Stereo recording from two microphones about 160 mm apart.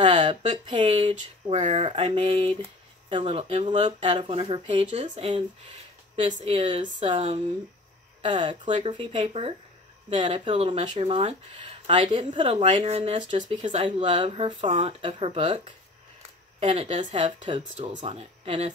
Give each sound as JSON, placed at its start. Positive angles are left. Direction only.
{"t": 0.1, "sound": "speech", "side_deg": -30}
{"t": 1.5, "sound": "speech", "side_deg": -45}
{"t": 1.9, "sound": "speech", "side_deg": -35}